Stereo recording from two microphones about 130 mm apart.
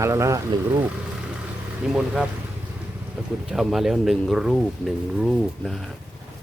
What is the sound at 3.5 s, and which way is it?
Speech, centre (ahead or behind).